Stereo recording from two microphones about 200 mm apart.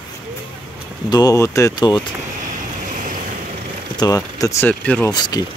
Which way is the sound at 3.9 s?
20° left (ahead or behind).